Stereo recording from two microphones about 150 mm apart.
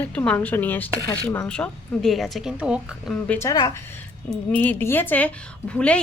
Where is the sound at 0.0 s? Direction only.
10° left (ahead or behind); by 2.8 s 5° right (ahead or behind).